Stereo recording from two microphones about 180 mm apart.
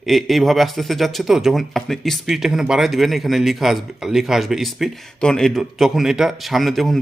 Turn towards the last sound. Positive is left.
turn(degrees=0)  # may be behind; listen again after turning